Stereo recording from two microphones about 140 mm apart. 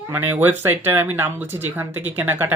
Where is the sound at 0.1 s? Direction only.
15° right (ahead or behind).